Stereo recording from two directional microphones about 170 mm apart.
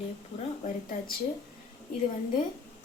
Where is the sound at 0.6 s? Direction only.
55° left (ahead or behind).